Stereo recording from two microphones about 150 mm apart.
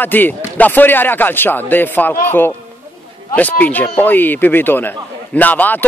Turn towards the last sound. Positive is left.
turn(degrees=10)  # may be behind; listen again after turning